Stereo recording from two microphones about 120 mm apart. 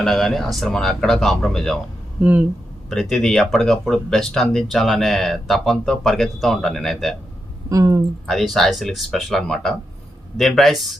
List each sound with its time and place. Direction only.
0.0 s speech: 5° left (ahead or behind)
2.2 s speech: 10° right (ahead or behind)
2.9 s speech: 5° left (ahead or behind)
7.7 s speech: 25° right (ahead or behind)
8.3 s speech: centre (ahead or behind)